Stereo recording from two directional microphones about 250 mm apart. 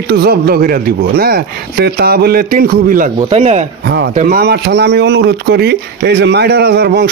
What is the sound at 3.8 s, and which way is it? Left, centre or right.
Speech, right.